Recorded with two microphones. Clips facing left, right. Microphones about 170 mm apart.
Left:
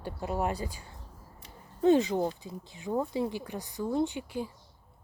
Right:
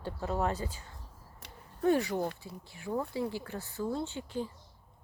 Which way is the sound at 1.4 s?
75° right (ahead or behind).